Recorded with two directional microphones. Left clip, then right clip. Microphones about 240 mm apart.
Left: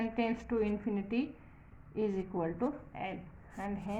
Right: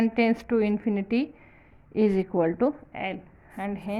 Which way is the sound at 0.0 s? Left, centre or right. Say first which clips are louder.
Right 10 dB; right.